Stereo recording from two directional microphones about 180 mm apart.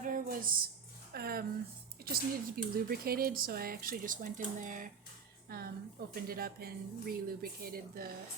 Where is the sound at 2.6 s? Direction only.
55° right (ahead or behind).